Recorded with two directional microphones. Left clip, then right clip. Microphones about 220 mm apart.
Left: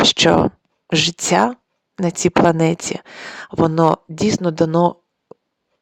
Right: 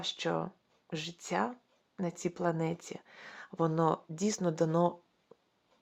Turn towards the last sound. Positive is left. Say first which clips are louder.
# left 14 dB
turn(degrees=40)  # may be behind; listen again after turning